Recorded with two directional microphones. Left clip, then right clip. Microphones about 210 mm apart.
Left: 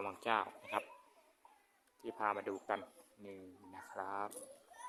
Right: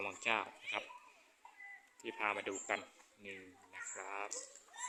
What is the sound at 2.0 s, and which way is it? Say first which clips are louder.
Speech: even; 5° left (ahead or behind).